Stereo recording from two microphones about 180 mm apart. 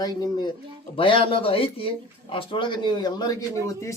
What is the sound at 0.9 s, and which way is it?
A man's voice, 30° left (ahead or behind).